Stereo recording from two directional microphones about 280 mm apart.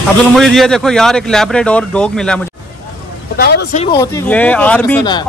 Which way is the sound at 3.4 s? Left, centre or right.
Left.